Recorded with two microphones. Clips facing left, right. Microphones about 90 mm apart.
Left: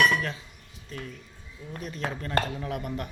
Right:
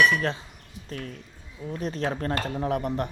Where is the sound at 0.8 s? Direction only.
50° right (ahead or behind).